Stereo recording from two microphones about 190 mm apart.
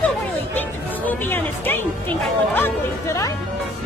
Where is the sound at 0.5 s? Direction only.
10° left (ahead or behind).